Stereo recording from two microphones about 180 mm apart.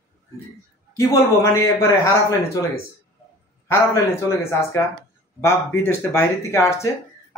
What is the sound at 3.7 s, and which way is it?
A man's voice, 15° left (ahead or behind).